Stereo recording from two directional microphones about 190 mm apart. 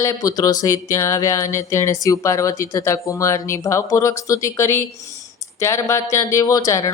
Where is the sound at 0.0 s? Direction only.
15° left (ahead or behind).